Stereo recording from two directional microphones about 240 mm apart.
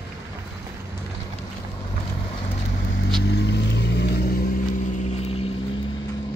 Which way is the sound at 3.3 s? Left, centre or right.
Left.